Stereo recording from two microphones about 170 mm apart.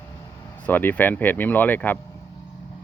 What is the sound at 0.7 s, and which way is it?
Speech, 10° left (ahead or behind).